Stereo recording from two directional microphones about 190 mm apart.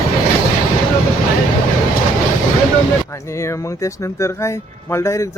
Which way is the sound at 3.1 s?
15° left (ahead or behind).